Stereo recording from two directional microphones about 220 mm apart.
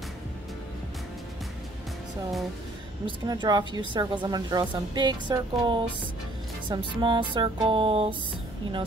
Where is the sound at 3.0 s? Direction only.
20° right (ahead or behind).